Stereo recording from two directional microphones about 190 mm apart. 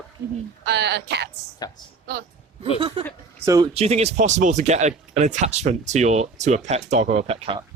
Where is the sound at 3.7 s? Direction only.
35° right (ahead or behind).